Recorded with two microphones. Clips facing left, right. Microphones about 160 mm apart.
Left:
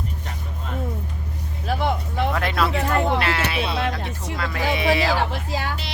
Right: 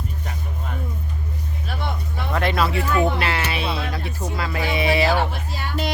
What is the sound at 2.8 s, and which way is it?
Speech, 65° left (ahead or behind).